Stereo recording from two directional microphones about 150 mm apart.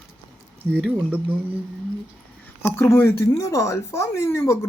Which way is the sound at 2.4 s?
15° left (ahead or behind).